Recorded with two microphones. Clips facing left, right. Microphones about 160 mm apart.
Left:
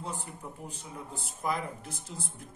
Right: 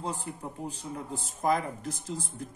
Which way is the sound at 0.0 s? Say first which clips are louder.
Right 4 dB; 35° right (ahead or behind).